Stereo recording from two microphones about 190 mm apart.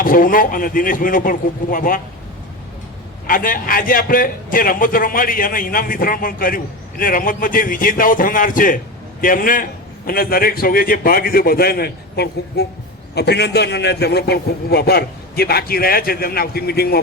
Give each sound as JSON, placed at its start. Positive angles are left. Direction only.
{"t": 0.0, "sound": "a man's voice", "side_deg": 45}
{"t": 3.2, "sound": "a man's voice", "side_deg": 45}